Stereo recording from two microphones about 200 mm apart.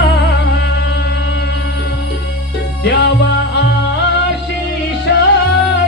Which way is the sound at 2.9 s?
60° left (ahead or behind).